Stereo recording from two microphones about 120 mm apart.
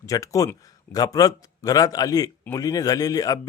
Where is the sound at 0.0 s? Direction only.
25° left (ahead or behind).